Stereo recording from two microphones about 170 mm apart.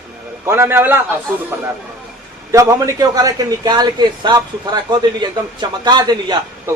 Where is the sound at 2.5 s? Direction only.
20° right (ahead or behind).